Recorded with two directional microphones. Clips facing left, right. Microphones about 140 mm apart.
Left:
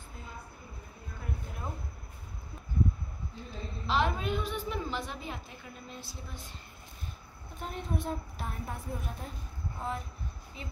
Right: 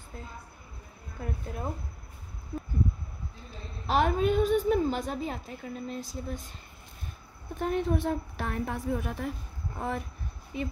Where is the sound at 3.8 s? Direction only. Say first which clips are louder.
Right 5 dB; 50° right (ahead or behind).